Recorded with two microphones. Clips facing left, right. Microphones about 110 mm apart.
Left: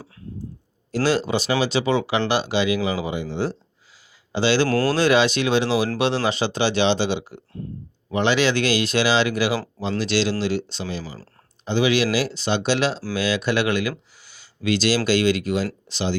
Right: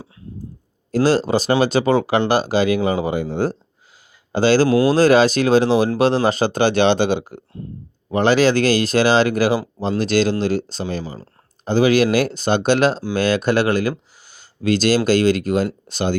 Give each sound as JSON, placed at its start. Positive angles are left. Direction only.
{"t": 1.0, "sound": "speech", "side_deg": -40}
{"t": 4.7, "sound": "speech", "side_deg": -15}
{"t": 4.9, "sound": "speech", "side_deg": -40}